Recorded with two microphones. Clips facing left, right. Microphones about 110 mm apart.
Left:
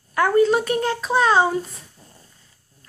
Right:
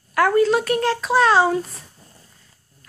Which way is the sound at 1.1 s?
5° right (ahead or behind).